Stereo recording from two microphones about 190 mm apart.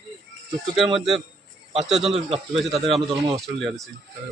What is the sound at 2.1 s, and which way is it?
Speech, 30° right (ahead or behind).